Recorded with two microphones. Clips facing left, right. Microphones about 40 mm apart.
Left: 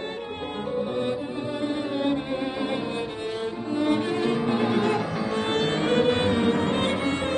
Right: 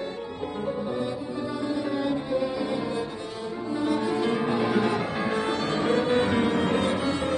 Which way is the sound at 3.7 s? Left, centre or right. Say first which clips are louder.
Left 2 dB; left.